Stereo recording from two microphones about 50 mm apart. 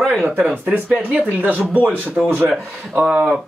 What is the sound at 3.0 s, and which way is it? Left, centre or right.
Speech, centre.